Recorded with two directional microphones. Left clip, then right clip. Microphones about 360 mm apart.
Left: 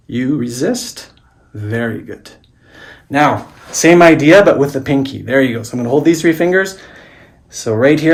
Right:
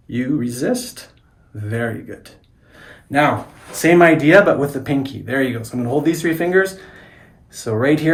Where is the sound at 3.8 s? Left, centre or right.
Left.